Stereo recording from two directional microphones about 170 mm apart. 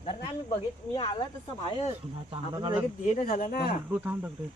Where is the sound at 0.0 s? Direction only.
30° left (ahead or behind).